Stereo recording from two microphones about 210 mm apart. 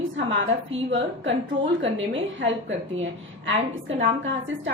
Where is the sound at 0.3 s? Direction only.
65° right (ahead or behind).